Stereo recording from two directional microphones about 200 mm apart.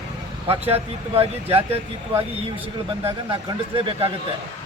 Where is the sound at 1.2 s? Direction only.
30° right (ahead or behind).